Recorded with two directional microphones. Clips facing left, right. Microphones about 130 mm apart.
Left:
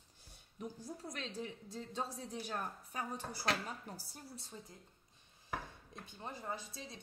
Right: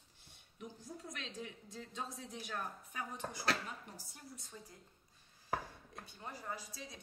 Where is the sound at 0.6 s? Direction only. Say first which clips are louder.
Left 3 dB; 35° left (ahead or behind).